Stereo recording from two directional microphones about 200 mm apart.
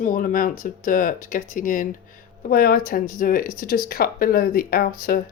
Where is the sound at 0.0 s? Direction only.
45° left (ahead or behind).